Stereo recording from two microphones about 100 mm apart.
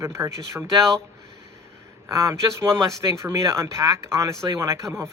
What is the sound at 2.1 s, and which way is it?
Speech, 30° right (ahead or behind).